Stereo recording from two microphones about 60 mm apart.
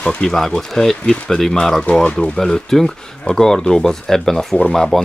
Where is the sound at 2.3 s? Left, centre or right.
Centre.